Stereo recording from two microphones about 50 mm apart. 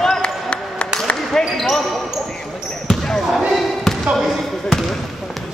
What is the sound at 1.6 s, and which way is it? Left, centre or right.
Basketball bounce, centre.